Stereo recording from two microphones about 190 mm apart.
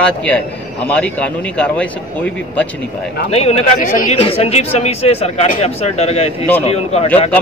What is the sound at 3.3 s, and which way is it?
Speech, 35° left (ahead or behind).